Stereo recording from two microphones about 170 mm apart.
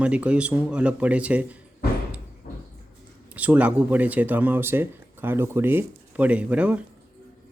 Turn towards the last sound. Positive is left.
turn(degrees=-10)  # may be behind; listen again after turning